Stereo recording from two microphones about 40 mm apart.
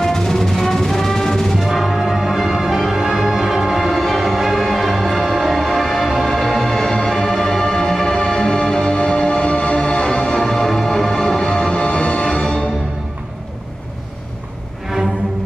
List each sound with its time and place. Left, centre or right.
0.0 s music: centre
6.5 s music: centre